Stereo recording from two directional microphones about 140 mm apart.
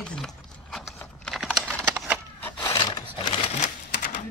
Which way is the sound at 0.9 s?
5° left (ahead or behind).